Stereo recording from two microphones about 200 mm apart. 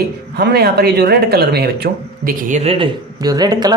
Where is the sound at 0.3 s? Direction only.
50° right (ahead or behind).